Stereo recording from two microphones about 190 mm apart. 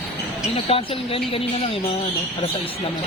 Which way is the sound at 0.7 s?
30° left (ahead or behind).